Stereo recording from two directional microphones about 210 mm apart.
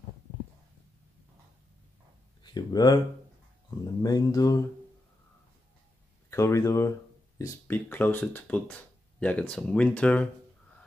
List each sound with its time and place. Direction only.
2.4 s speech: 20° left (ahead or behind)
6.3 s speech: 15° left (ahead or behind)